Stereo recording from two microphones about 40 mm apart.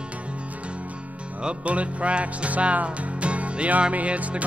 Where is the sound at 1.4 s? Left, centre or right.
Right.